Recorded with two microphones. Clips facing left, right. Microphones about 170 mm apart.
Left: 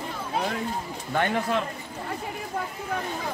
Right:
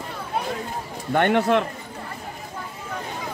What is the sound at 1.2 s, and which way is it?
Speech, 65° right (ahead or behind).